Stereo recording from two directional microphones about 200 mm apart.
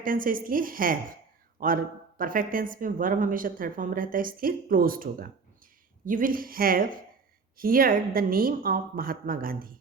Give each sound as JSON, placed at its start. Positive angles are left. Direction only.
{"t": 0.0, "sound": "speech", "side_deg": -45}